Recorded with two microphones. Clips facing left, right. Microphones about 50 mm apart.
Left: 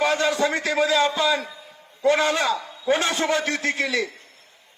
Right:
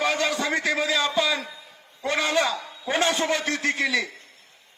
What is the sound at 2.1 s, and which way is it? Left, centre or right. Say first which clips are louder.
A man's voice: left 2 dB; left.